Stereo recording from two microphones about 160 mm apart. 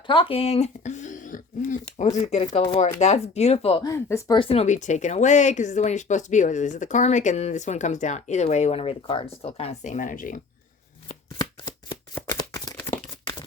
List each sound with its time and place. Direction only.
0.1 s speech: 30° left (ahead or behind)
3.8 s speech: 20° left (ahead or behind)
4.4 s speech: 35° left (ahead or behind); by 10.4 s 55° left (ahead or behind)
11.3 s shuffling cards: 20° left (ahead or behind)